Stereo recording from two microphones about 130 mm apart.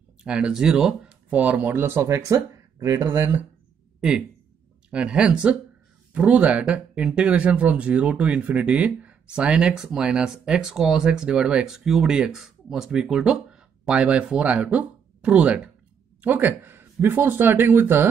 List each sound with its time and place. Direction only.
0.2 s speech: 5° right (ahead or behind)
4.9 s speech: 10° right (ahead or behind)